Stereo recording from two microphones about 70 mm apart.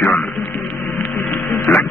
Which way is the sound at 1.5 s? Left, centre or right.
Left.